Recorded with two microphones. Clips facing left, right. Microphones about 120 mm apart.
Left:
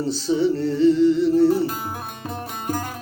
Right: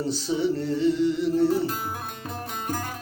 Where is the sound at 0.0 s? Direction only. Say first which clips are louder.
Left 5 dB; 15° right (ahead or behind).